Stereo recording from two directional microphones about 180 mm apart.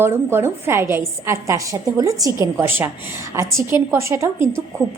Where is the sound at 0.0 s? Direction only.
15° right (ahead or behind).